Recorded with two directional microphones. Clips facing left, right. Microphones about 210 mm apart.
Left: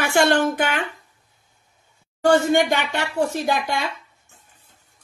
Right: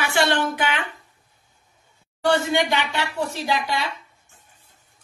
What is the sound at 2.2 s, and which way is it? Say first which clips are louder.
Speech: left 4 dB; 45° left (ahead or behind).